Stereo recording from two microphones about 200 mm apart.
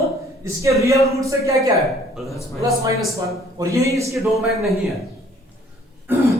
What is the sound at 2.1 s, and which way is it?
Speech, centre (ahead or behind).